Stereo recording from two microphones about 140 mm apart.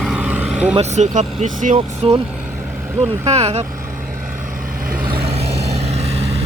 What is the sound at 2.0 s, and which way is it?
Speech, 45° right (ahead or behind).